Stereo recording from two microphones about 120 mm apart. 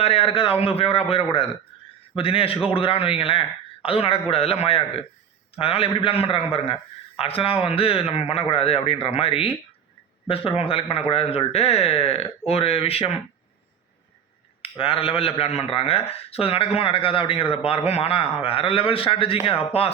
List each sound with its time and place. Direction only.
0.0 s speech: 55° left (ahead or behind)
14.6 s speech: 50° left (ahead or behind)